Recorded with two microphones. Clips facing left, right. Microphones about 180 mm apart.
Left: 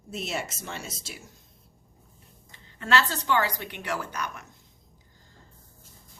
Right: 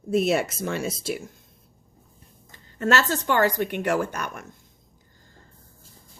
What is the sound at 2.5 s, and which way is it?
A woman's voice, 45° right (ahead or behind).